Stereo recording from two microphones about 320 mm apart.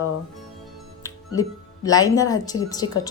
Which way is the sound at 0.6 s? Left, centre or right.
Centre.